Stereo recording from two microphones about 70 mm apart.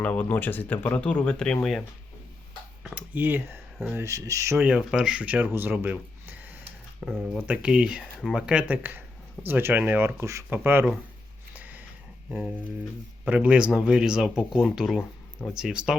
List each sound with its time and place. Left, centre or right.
0.0 s speech: centre
2.9 s speech: right
3.9 s speech: right
4.7 s speech: centre
5.2 s speech: right
5.5 s a sound: right
7.0 s speech: centre; by 10.1 s right
10.2 s speech: right
10.5 s speech: right
11.5 s a sound: right
13.2 s speech: centre